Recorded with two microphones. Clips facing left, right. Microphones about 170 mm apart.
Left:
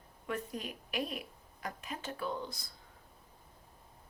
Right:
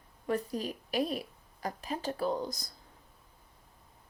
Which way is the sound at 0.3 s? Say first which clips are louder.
Right 6 dB; 35° right (ahead or behind).